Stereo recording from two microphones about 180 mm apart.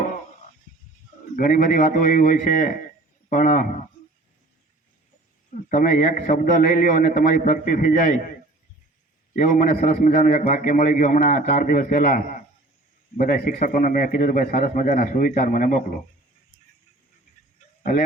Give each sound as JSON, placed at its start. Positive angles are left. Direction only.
{"t": 1.4, "sound": "a man's voice", "side_deg": 50}
{"t": 5.6, "sound": "a man's voice", "side_deg": 50}
{"t": 9.3, "sound": "a man's voice", "side_deg": 45}